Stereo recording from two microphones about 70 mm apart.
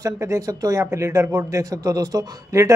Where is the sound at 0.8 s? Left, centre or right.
Right.